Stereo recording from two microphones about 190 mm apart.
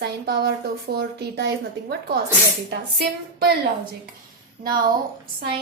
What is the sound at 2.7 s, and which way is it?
Speech, 55° right (ahead or behind).